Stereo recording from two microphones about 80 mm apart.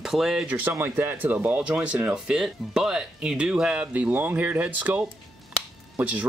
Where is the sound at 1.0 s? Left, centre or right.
Right.